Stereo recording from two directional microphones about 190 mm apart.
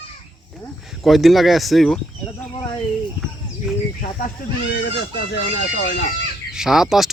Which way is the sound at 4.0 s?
50° left (ahead or behind).